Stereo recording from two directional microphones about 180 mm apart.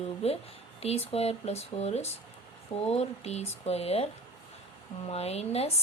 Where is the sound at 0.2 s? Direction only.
35° left (ahead or behind).